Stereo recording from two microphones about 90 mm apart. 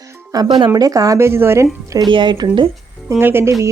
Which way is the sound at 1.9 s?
60° right (ahead or behind).